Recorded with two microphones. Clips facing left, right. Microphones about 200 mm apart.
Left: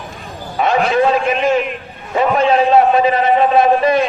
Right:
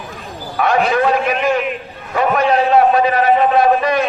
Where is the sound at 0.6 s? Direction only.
25° left (ahead or behind).